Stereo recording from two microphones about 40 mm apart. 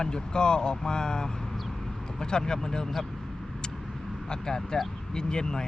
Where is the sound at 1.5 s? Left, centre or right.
Centre.